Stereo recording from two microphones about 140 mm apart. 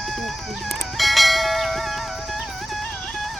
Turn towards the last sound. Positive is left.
turn(degrees=0)  # may be behind; listen again after turning